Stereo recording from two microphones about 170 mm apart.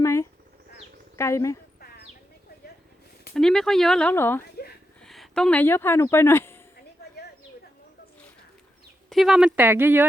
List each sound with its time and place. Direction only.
0.0 s a sound: 15° left (ahead or behind)
1.1 s speech: 15° left (ahead or behind)
3.3 s speech: 5° left (ahead or behind)
5.0 s speech: centre (ahead or behind)
9.0 s speech: centre (ahead or behind)